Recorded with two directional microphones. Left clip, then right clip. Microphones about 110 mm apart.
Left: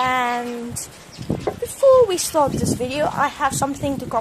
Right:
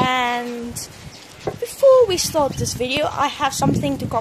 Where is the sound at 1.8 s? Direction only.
10° right (ahead or behind).